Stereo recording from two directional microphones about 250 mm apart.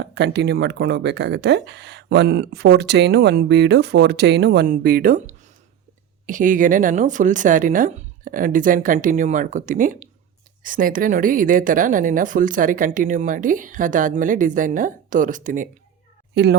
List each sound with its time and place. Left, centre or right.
0.0 s speech: right
16.3 s a woman's voice: right